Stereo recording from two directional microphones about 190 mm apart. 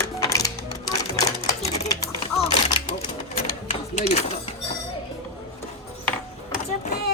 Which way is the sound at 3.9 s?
35° left (ahead or behind).